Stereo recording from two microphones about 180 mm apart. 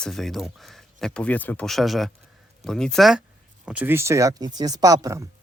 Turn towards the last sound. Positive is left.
turn(degrees=-20)  # may be behind; listen again after turning